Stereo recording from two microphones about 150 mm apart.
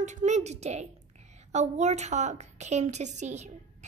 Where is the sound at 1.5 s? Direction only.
50° right (ahead or behind).